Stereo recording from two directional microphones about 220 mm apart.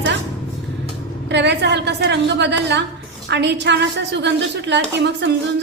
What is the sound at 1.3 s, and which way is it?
A woman's voice, 50° right (ahead or behind).